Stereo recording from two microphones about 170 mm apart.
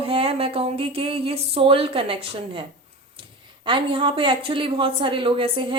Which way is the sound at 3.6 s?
30° right (ahead or behind).